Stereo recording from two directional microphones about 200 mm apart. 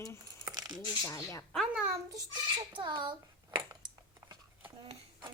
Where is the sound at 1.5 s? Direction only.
Centre (ahead or behind).